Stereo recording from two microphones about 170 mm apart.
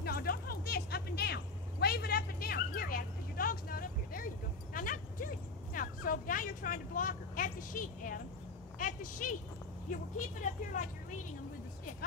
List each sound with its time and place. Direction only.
0.0 s a sound: 65° left (ahead or behind)
8.7 s a woman's voice: 50° left (ahead or behind)
10.4 s speech: 50° left (ahead or behind)